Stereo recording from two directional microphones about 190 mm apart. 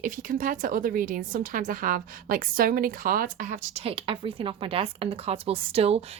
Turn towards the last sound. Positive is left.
turn(degrees=-30)  # may be behind; listen again after turning